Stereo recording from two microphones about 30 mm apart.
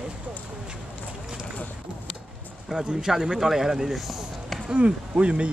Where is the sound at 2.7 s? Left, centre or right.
Right.